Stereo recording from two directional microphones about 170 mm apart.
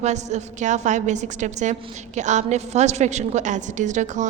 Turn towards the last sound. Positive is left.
turn(degrees=-45)  # may be behind; listen again after turning